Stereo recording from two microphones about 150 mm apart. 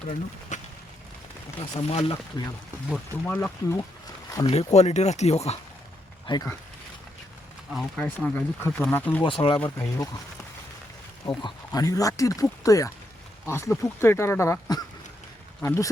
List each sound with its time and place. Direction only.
0.5 s a sound: 55° left (ahead or behind)
1.5 s speech: 40° left (ahead or behind)
2.9 s speech: 10° left (ahead or behind)
4.3 s speech: 25° left (ahead or behind)
4.5 s speech: 45° left (ahead or behind)
6.2 s speech: 30° left (ahead or behind)
7.7 s speech: centre (ahead or behind)
9.2 s speech: 35° left (ahead or behind)
9.6 s speech: 10° left (ahead or behind)
11.3 s speech: 30° left (ahead or behind)